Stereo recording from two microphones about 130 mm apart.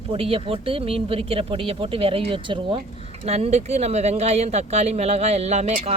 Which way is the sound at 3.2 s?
55° right (ahead or behind).